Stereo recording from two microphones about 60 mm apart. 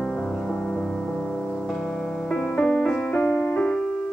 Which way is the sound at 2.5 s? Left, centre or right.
Left.